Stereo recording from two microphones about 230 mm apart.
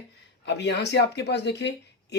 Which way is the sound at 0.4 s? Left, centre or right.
Left.